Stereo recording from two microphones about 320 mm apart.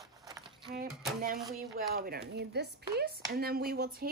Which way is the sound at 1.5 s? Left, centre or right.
Right.